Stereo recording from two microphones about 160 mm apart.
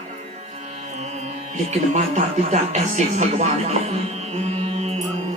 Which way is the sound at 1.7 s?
45° right (ahead or behind).